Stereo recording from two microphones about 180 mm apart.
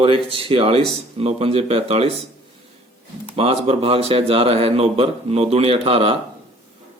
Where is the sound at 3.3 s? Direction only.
35° right (ahead or behind).